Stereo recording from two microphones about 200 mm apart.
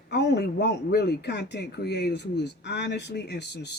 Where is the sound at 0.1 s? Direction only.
55° left (ahead or behind).